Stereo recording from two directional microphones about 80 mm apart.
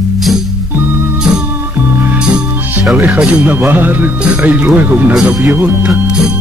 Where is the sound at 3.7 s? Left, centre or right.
Right.